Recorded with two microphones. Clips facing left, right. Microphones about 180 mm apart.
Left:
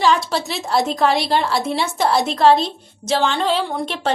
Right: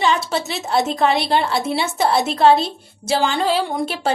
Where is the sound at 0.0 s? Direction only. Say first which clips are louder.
Left 1 dB; centre (ahead or behind).